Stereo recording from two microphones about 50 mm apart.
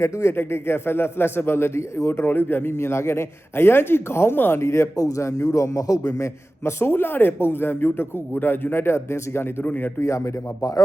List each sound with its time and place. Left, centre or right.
0.0 s speech: left
0.3 s a man's voice: left
4.6 s a man's voice: left
8.7 s a man's voice: left
9.6 s speech: left
10.0 s speech: left